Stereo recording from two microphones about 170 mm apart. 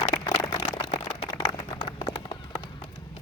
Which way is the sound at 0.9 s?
35° left (ahead or behind).